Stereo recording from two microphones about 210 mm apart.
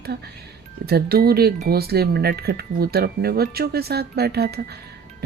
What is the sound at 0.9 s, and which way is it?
Speech, 50° right (ahead or behind).